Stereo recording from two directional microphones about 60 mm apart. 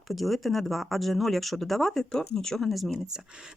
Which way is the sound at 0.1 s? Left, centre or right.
Centre.